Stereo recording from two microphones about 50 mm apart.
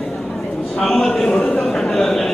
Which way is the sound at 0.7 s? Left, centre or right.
Centre.